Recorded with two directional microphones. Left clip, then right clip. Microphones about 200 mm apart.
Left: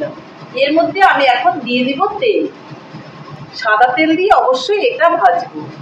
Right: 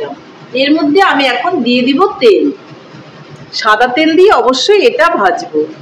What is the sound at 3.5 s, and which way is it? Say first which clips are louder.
Speech: right 2 dB; 50° right (ahead or behind).